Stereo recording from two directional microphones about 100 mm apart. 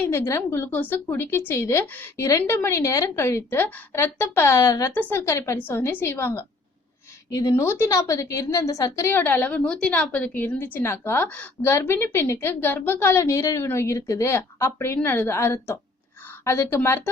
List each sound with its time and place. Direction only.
0.1 s a woman's voice: 25° left (ahead or behind)
4.9 s a woman's voice: 20° left (ahead or behind)
9.0 s a woman's voice: 20° left (ahead or behind)